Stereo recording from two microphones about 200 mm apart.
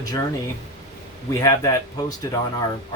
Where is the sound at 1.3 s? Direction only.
15° left (ahead or behind).